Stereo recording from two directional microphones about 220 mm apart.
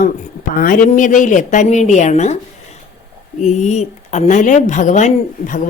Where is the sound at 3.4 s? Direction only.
30° left (ahead or behind).